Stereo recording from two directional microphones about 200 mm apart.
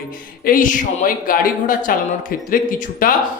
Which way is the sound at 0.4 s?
40° left (ahead or behind).